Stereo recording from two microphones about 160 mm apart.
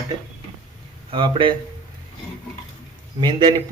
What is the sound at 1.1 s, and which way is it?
Speech, 30° right (ahead or behind).